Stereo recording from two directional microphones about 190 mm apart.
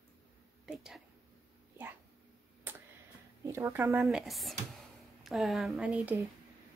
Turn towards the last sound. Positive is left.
turn(degrees=-5)  # may be behind; listen again after turning